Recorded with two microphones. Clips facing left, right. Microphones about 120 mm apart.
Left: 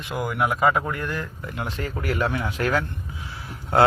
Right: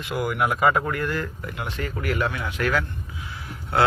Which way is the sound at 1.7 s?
35° left (ahead or behind).